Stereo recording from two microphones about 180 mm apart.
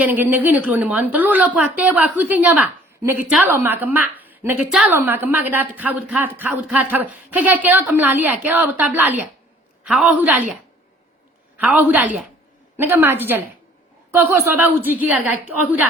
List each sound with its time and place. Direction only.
0.0 s a woman's voice: 10° right (ahead or behind)
11.5 s a woman's voice: 10° right (ahead or behind)